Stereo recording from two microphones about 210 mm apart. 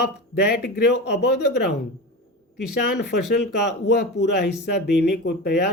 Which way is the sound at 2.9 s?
50° left (ahead or behind).